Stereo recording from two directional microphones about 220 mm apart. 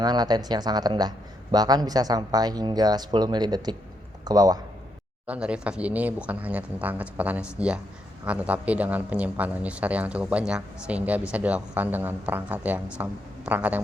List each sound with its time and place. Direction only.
0.0 s a man's voice: 20° right (ahead or behind)
5.2 s a man's voice: 5° right (ahead or behind)